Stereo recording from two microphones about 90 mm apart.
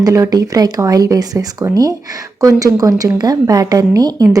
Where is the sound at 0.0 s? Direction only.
45° right (ahead or behind).